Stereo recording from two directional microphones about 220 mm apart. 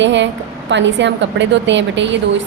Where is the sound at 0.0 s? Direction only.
55° right (ahead or behind).